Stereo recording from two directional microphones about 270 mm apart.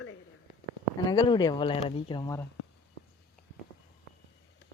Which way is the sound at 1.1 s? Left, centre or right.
Centre.